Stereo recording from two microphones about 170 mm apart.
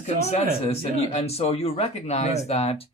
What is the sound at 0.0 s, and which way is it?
Speech, 40° left (ahead or behind).